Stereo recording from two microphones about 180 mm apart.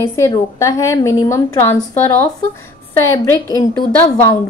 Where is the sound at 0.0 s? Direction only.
15° left (ahead or behind).